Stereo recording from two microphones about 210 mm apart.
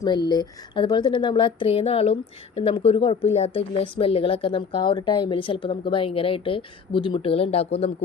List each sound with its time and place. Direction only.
0.0 s a woman's voice: 20° left (ahead or behind)